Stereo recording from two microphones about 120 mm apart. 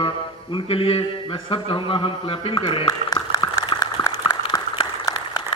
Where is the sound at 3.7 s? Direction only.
40° left (ahead or behind).